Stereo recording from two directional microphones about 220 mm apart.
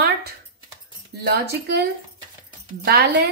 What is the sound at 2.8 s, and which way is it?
Speech, 45° right (ahead or behind).